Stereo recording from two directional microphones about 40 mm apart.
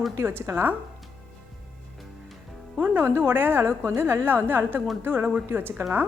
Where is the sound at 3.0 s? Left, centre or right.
Right.